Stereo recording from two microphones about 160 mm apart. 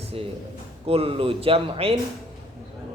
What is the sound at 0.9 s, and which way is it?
A man's voice, 35° right (ahead or behind).